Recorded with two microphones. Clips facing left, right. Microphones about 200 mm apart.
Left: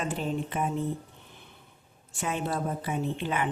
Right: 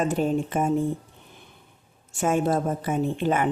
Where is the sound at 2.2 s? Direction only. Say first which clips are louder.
Right 8 dB; 45° right (ahead or behind).